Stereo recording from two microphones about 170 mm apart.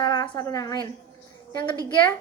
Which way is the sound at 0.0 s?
25° left (ahead or behind).